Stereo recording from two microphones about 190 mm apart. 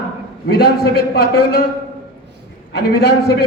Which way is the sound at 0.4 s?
55° left (ahead or behind).